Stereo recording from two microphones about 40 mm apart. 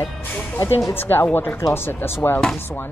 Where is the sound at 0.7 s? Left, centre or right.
Left.